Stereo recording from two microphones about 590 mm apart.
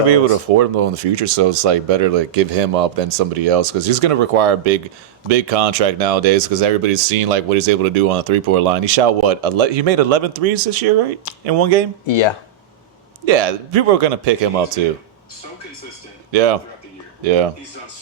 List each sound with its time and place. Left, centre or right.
0.1 s speech: right
12.0 s speech: left
13.2 s a man's voice: right
16.3 s speech: right
17.2 s speech: right